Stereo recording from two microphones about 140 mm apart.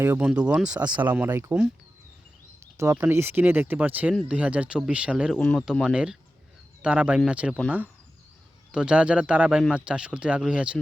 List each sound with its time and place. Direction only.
0.0 s speech: 15° right (ahead or behind)
2.7 s speech: 20° right (ahead or behind)
5.4 s speech: 10° left (ahead or behind)
5.9 s speech: 5° right (ahead or behind)
8.7 s speech: 5° right (ahead or behind)